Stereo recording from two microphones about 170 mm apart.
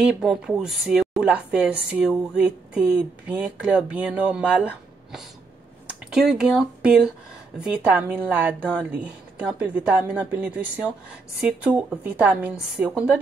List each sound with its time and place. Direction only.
0.0 s speech: 5° right (ahead or behind)